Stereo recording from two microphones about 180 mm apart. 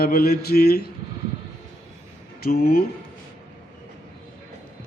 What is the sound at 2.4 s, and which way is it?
Mantra, 55° left (ahead or behind).